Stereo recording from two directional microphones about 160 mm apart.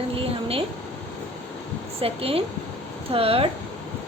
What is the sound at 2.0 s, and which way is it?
A woman's voice, 35° right (ahead or behind).